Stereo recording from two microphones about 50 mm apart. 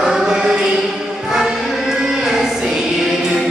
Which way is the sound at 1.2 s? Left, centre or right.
Centre.